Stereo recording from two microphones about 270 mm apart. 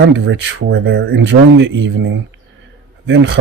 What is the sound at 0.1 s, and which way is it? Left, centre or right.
Speech, right.